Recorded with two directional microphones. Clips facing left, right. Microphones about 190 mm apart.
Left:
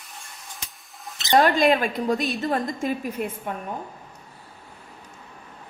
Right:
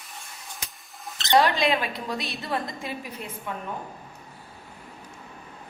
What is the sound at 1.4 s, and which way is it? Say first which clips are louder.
A woman's voice: left 3 dB; 50° left (ahead or behind).